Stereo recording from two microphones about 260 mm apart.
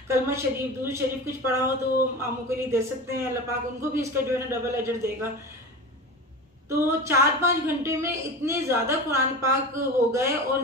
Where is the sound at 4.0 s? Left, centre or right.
Centre.